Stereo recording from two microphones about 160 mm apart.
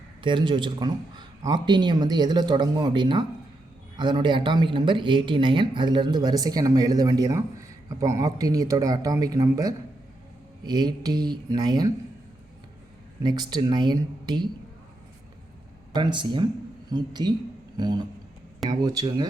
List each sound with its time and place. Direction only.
0.2 s speech: 30° right (ahead or behind)
13.2 s speech: 25° right (ahead or behind)
15.9 s speech: 30° right (ahead or behind)